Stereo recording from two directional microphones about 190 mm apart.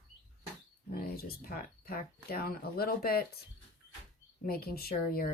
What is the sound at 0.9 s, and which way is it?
Speech, 55° left (ahead or behind).